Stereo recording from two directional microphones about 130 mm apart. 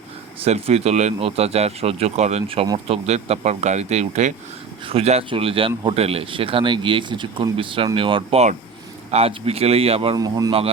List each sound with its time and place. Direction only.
0.4 s speech: 55° right (ahead or behind)
4.9 s speech: 50° right (ahead or behind)
10.2 s speech: 30° right (ahead or behind)